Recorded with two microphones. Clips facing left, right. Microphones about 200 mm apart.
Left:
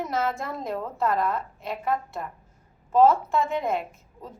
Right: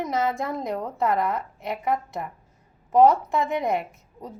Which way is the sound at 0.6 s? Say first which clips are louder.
Even; 15° right (ahead or behind).